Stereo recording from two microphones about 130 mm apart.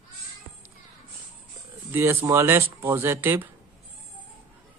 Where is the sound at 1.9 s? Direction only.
20° right (ahead or behind).